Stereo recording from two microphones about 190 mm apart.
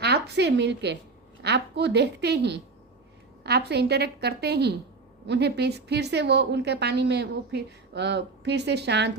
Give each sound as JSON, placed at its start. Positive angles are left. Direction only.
{"t": 0.0, "sound": "a woman's voice", "side_deg": -60}